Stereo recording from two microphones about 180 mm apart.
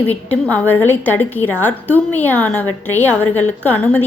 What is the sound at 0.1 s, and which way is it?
A woman's voice, 10° left (ahead or behind).